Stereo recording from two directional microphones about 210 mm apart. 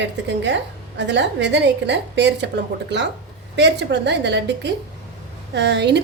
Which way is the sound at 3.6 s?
55° right (ahead or behind).